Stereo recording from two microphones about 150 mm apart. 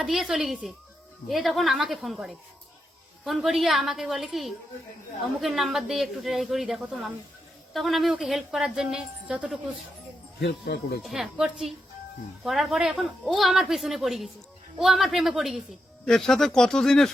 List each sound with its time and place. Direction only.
0.0 s a woman's voice: 5° right (ahead or behind)
10.4 s speech: 90° left
11.0 s a woman's voice: centre (ahead or behind)